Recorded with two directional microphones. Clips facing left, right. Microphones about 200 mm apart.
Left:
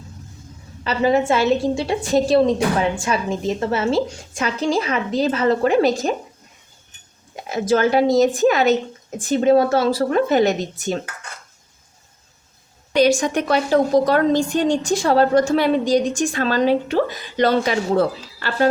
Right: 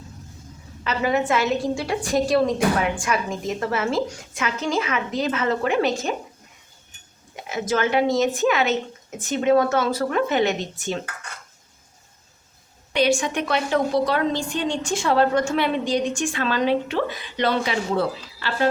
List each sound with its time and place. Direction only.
0.9 s a woman's voice: 30° left (ahead or behind)
7.5 s a woman's voice: 35° left (ahead or behind)
12.9 s a woman's voice: 40° left (ahead or behind)